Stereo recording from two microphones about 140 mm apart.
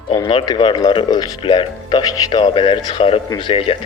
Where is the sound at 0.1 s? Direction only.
30° left (ahead or behind).